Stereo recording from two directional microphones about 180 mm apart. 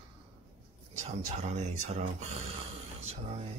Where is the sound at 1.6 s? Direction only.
40° right (ahead or behind).